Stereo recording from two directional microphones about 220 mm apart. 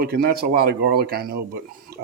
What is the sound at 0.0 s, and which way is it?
Speech, 45° right (ahead or behind).